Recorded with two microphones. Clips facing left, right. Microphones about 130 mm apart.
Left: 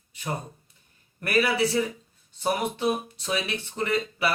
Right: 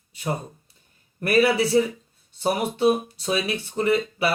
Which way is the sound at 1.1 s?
30° right (ahead or behind).